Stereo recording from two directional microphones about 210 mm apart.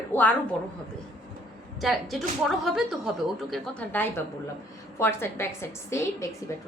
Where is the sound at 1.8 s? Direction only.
Centre (ahead or behind).